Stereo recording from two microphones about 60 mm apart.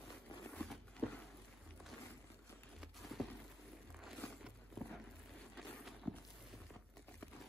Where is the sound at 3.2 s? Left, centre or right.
Centre.